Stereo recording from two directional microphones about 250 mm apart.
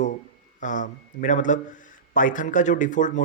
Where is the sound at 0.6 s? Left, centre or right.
Left.